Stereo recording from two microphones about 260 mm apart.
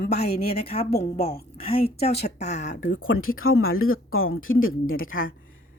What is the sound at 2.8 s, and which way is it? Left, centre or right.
Speech, left.